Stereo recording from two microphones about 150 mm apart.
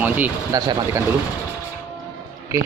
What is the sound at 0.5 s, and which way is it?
Speech, 25° right (ahead or behind).